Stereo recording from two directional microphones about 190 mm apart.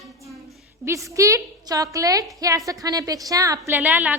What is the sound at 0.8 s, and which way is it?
A woman's voice, 15° right (ahead or behind).